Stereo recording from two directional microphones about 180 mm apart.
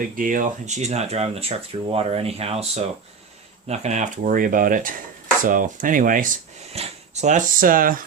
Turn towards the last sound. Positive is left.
turn(degrees=-50)  # may be behind; listen again after turning